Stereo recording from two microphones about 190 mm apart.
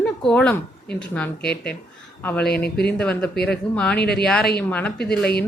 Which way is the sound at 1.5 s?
60° left (ahead or behind).